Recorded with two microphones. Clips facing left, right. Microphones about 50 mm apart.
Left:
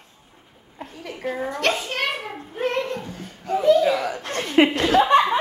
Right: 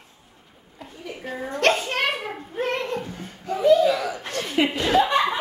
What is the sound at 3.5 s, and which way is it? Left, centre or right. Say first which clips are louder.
Chuckle: even; centre.